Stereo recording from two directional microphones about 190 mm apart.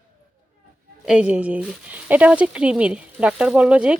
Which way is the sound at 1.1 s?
5° right (ahead or behind).